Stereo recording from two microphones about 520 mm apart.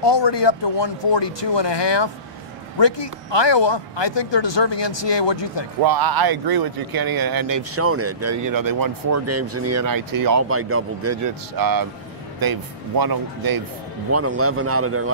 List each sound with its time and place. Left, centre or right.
0.0 s speech: left
5.8 s speech: right
10.5 s a man's voice: right
11.5 s speech: right
14.1 s a man's voice: right